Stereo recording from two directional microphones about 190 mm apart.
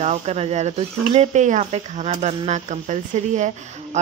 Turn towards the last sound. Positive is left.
turn(degrees=-35)  # may be behind; listen again after turning